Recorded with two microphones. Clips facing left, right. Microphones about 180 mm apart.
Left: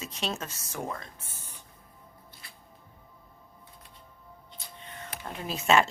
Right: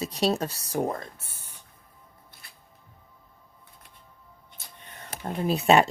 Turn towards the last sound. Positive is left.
turn(degrees=-35)  # may be behind; listen again after turning